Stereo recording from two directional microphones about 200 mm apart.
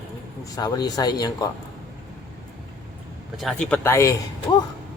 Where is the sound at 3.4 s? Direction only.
Centre (ahead or behind).